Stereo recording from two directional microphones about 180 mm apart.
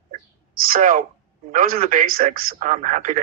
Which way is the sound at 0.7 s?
50° right (ahead or behind).